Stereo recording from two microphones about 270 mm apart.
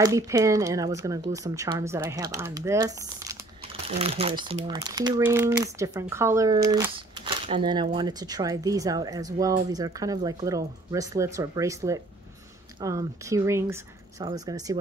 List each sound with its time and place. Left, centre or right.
0.0 s speech: centre